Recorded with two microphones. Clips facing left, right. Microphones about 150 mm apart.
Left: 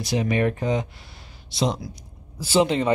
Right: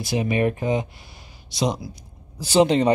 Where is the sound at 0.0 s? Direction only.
15° right (ahead or behind).